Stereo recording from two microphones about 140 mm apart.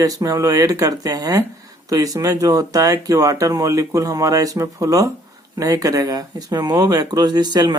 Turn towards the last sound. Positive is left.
turn(degrees=-30)  # may be behind; listen again after turning